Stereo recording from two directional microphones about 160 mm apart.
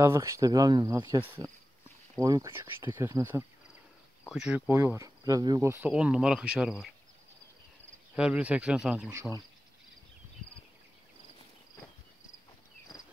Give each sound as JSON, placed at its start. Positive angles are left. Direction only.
{"t": 0.0, "sound": "speech", "side_deg": -20}
{"t": 4.3, "sound": "speech", "side_deg": -5}
{"t": 5.9, "sound": "speech", "side_deg": -5}
{"t": 8.2, "sound": "speech", "side_deg": -10}